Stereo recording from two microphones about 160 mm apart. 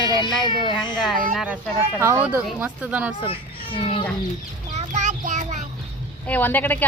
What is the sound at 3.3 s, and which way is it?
Children playing, 35° left (ahead or behind).